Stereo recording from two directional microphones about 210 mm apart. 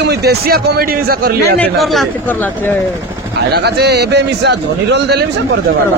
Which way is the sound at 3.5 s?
50° right (ahead or behind).